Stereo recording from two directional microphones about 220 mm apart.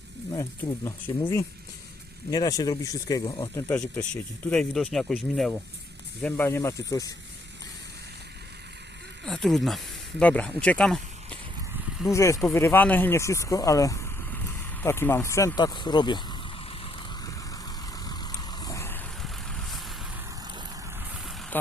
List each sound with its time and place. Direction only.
0.9 s speech: 10° left (ahead or behind)
3.7 s speech: 5° left (ahead or behind)
9.2 s speech: centre (ahead or behind)
11.9 s a sound: 5° right (ahead or behind)
12.1 s speech: 15° left (ahead or behind)
16.8 s vehicle: 15° left (ahead or behind)
21.5 s speech: 10° left (ahead or behind)